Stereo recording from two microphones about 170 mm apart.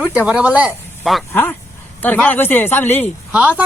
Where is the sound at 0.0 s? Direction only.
5° right (ahead or behind).